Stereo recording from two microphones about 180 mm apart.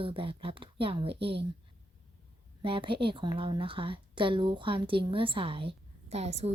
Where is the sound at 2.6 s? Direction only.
30° right (ahead or behind).